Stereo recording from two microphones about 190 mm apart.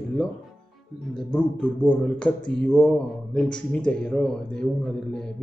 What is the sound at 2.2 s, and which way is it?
A man's voice, 5° left (ahead or behind).